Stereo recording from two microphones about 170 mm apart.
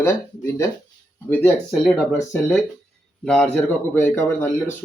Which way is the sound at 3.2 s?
5° left (ahead or behind).